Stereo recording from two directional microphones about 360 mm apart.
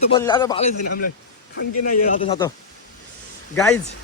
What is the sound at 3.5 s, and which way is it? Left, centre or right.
Speech, centre.